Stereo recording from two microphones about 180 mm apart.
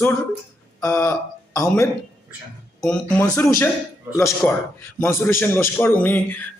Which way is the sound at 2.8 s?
5° left (ahead or behind).